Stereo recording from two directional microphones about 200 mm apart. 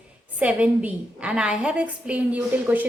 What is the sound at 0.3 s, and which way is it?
A woman's voice, 5° right (ahead or behind).